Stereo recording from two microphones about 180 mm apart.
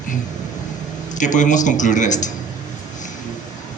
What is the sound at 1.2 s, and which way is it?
A man's voice, 45° left (ahead or behind).